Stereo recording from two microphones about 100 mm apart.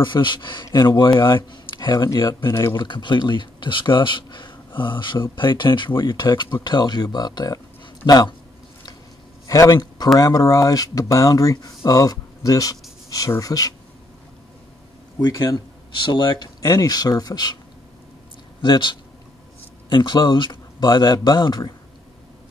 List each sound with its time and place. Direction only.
0.0 s speech: 55° left (ahead or behind)
9.5 s a man's voice: 35° left (ahead or behind)
15.1 s speech: 35° left (ahead or behind)
16.7 s speech: 40° left (ahead or behind)
18.6 s speech: 55° left (ahead or behind)